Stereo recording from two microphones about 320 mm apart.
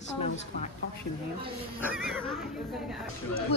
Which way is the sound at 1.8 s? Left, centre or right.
Centre.